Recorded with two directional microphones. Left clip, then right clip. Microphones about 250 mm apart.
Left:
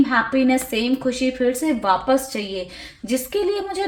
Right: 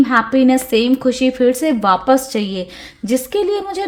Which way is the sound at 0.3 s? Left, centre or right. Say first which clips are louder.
Right 6 dB; right.